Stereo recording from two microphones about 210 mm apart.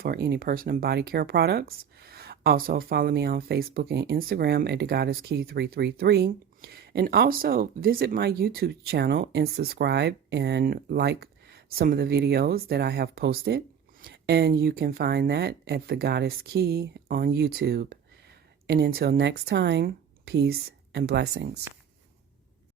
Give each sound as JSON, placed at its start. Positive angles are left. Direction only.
{"t": 0.0, "sound": "speech", "side_deg": -50}